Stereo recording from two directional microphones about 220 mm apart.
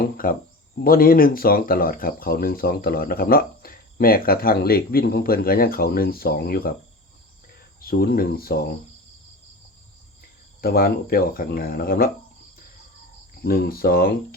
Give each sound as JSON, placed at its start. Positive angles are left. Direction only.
{"t": 0.0, "sound": "a sound", "side_deg": 40}
{"t": 0.9, "sound": "speech", "side_deg": 40}
{"t": 7.8, "sound": "speech", "side_deg": 40}
{"t": 10.6, "sound": "speech", "side_deg": 45}
{"t": 13.4, "sound": "speech", "side_deg": 45}